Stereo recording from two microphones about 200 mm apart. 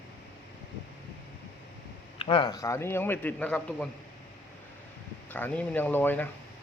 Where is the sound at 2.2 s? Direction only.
25° left (ahead or behind); by 3.9 s 5° left (ahead or behind).